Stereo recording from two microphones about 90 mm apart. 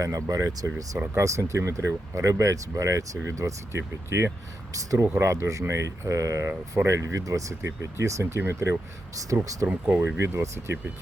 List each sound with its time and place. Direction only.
0.0 s speech: 40° right (ahead or behind)
9.6 s speech: 15° right (ahead or behind)
10.2 s speech: 30° right (ahead or behind)